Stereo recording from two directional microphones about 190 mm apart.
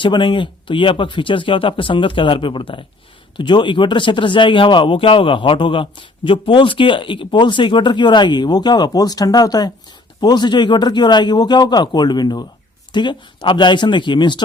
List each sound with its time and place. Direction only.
0.0 s a man's voice: 25° left (ahead or behind)